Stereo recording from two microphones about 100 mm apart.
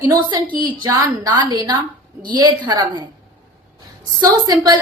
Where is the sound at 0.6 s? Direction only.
50° right (ahead or behind).